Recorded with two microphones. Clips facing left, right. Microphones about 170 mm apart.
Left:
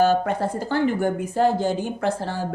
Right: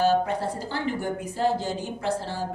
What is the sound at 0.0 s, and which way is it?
A woman's voice, 55° left (ahead or behind).